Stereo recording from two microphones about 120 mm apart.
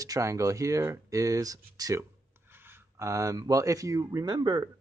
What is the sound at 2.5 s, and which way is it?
Speech, 20° right (ahead or behind).